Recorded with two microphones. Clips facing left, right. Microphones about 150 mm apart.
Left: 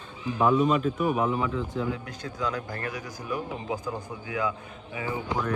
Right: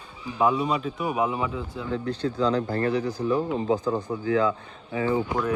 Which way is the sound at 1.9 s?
30° right (ahead or behind).